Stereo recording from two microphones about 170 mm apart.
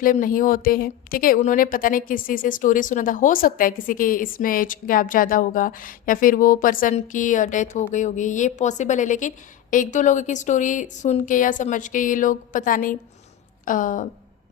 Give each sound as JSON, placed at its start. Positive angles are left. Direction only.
{"t": 0.0, "sound": "a woman's voice", "side_deg": 55}